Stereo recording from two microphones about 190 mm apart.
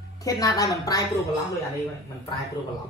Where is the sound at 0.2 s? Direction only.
20° left (ahead or behind).